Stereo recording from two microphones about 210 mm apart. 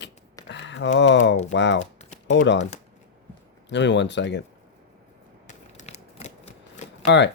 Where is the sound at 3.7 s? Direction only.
55° left (ahead or behind).